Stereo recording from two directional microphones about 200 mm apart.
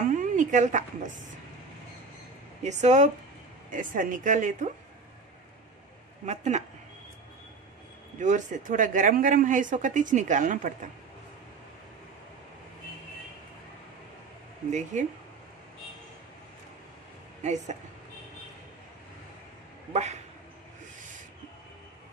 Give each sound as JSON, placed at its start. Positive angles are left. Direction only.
{"t": 0.1, "sound": "a sound", "side_deg": -40}
{"t": 2.6, "sound": "speech", "side_deg": -35}
{"t": 6.2, "sound": "speech", "side_deg": -35}
{"t": 8.2, "sound": "speech", "side_deg": -40}
{"t": 14.7, "sound": "speech", "side_deg": -35}
{"t": 17.4, "sound": "a woman's voice", "side_deg": -35}
{"t": 19.9, "sound": "speech", "side_deg": -35}